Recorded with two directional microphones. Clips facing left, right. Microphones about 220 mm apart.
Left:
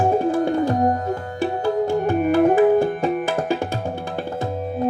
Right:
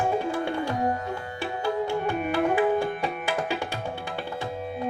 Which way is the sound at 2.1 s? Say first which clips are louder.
Left 11 dB; 35° left (ahead or behind).